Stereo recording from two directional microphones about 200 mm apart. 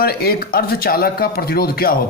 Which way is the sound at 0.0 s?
50° left (ahead or behind).